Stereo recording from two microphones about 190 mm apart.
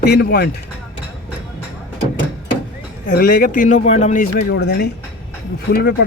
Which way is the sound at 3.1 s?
45° left (ahead or behind).